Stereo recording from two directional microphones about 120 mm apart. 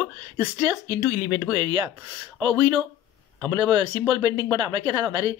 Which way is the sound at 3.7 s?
35° right (ahead or behind).